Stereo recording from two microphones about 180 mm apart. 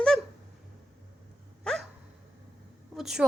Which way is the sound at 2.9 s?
Centre (ahead or behind).